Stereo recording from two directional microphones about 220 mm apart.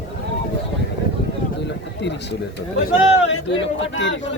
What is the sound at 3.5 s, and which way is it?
Speech, 55° left (ahead or behind).